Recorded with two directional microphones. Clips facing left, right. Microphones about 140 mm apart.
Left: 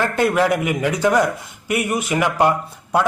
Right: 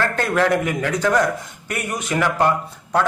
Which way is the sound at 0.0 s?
10° left (ahead or behind).